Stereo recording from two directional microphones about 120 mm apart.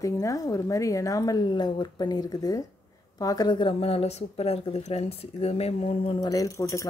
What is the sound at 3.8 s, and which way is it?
Speech, 60° left (ahead or behind).